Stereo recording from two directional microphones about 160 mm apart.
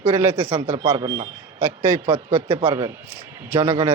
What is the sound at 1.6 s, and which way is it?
A man's voice, 15° right (ahead or behind).